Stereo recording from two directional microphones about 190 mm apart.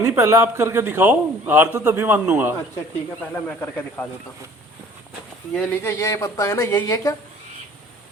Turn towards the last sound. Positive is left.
turn(degrees=15)  # may be behind; listen again after turning